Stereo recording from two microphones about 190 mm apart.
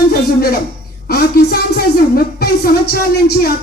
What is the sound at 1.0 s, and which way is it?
Speech, 55° left (ahead or behind).